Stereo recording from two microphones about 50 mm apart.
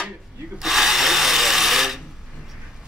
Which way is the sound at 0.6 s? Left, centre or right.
Centre.